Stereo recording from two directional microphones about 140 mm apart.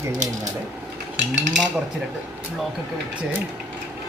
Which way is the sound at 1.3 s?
60° right (ahead or behind).